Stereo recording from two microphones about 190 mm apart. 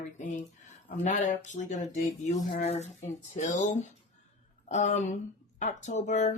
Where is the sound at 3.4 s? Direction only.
40° left (ahead or behind).